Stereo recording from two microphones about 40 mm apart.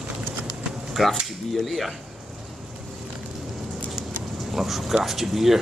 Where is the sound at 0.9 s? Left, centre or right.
Centre.